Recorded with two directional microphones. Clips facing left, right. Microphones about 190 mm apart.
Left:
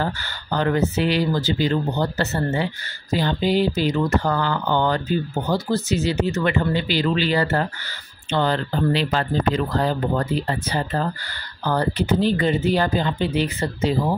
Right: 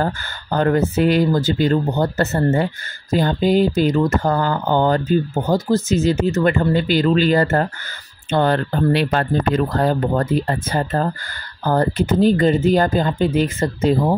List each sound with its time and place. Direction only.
0.0 s speech: 45° right (ahead or behind)